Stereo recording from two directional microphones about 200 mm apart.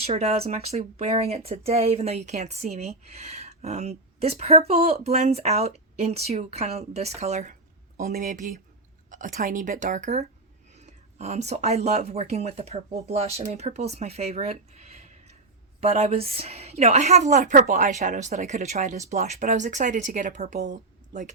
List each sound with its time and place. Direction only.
0.0 s speech: 30° right (ahead or behind)